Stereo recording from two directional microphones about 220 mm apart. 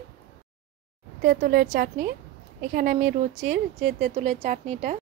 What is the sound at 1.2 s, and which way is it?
A woman's voice, 40° right (ahead or behind).